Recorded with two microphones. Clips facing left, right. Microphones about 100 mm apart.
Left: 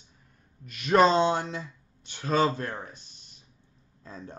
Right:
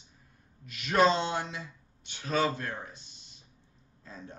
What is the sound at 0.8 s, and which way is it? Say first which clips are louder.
Speech: left 5 dB; 40° left (ahead or behind).